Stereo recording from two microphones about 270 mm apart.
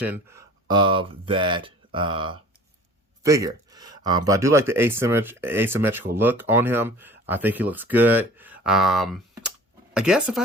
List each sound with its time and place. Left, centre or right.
0.0 s speech: centre